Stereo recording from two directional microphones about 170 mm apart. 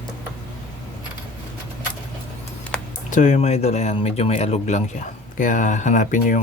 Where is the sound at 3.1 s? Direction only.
45° left (ahead or behind).